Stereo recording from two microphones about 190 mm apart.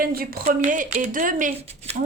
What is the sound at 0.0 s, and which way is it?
A woman's voice, 50° right (ahead or behind).